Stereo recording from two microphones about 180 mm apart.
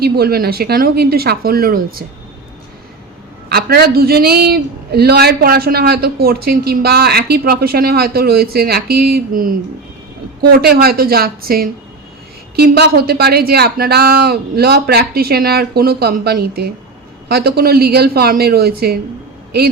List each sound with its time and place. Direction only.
0.0 s a man's voice: 60° right (ahead or behind)
3.5 s a man's voice: 60° right (ahead or behind)